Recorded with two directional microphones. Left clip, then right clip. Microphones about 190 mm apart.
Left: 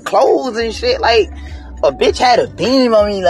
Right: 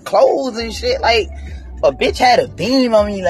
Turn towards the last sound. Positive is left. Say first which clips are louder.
# left 2 dB
turn(degrees=-5)  # may be behind; listen again after turning